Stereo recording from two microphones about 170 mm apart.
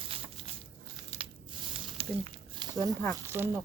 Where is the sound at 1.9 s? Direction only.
30° right (ahead or behind).